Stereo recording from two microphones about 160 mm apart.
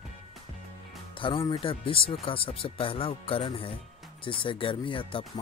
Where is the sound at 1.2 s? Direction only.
35° left (ahead or behind).